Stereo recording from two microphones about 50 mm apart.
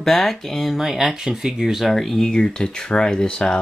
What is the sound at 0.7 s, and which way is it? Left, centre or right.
Speech, centre.